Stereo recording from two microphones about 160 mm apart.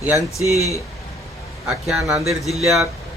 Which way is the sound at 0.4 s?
40° right (ahead or behind).